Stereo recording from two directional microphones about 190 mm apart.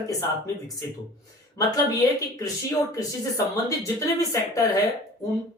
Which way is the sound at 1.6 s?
20° left (ahead or behind).